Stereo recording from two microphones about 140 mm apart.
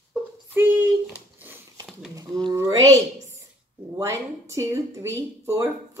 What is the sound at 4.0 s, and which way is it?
Speech, 20° right (ahead or behind).